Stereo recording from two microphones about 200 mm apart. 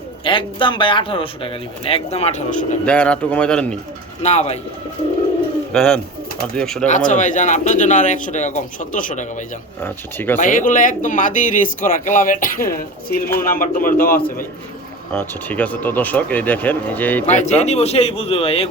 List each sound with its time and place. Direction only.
0.3 s a man's voice: 25° left (ahead or behind)
2.8 s a man's voice: 5° left (ahead or behind)
4.2 s speech: 35° left (ahead or behind)
5.7 s a man's voice: 5° left (ahead or behind)
6.8 s speech: 40° left (ahead or behind)
9.8 s speech: 10° left (ahead or behind)
10.4 s speech: 40° left (ahead or behind)
15.1 s speech: 10° left (ahead or behind)
17.3 s speech: 35° left (ahead or behind)